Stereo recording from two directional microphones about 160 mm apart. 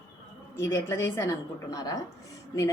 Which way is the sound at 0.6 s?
15° left (ahead or behind).